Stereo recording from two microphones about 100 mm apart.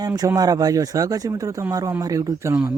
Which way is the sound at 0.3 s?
40° right (ahead or behind).